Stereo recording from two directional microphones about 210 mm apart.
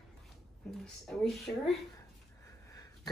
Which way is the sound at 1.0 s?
Centre (ahead or behind).